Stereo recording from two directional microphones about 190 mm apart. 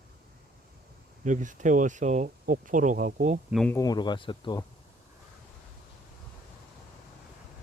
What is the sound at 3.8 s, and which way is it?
Speech, 20° left (ahead or behind).